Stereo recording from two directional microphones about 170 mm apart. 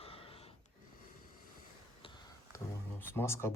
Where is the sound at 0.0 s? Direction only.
35° left (ahead or behind).